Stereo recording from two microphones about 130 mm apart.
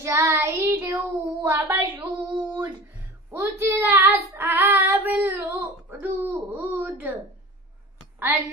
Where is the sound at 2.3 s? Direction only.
25° right (ahead or behind).